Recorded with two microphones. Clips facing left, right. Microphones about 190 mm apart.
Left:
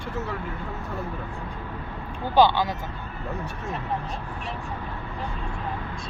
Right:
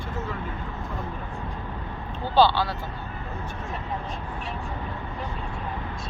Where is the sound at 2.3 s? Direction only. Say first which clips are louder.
Left 1 dB; 15° left (ahead or behind).